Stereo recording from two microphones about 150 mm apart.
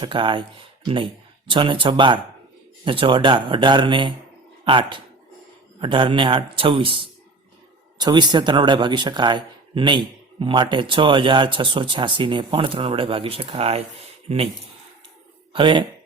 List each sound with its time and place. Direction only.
0.0 s speech: 35° right (ahead or behind)
15.5 s speech: 35° right (ahead or behind)